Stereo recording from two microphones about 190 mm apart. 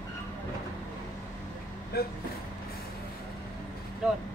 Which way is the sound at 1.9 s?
55° left (ahead or behind).